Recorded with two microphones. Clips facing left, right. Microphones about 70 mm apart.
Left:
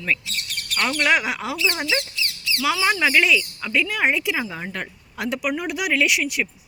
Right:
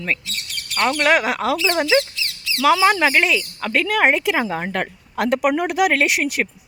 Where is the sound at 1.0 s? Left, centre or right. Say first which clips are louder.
Right 3 dB; right.